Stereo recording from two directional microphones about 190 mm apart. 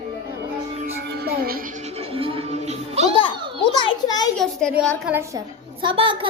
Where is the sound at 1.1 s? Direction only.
60° right (ahead or behind).